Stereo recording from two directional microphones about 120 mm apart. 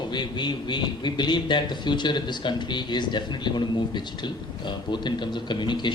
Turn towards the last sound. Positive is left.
turn(degrees=40)  # may be behind; listen again after turning